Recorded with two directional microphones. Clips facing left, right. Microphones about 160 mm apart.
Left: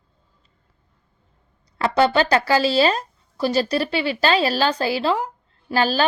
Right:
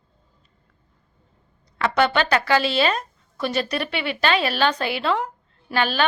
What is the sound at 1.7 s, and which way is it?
A woman's voice, 30° left (ahead or behind).